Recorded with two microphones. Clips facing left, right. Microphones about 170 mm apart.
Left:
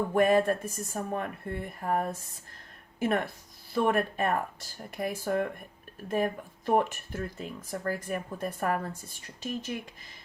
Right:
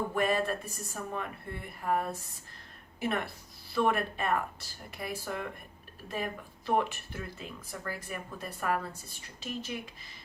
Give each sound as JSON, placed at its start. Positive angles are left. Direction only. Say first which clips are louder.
{"t": 0.1, "sound": "speech", "louder": "left 10 dB", "side_deg": 45}